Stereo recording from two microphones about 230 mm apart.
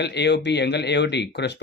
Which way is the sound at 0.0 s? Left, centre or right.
Left.